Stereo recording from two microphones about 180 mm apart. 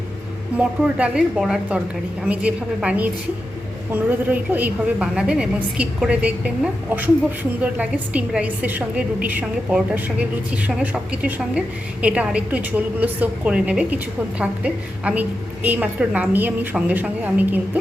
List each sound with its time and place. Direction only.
0.5 s a woman's voice: 5° right (ahead or behind)
7.6 s a woman's voice: 10° right (ahead or behind)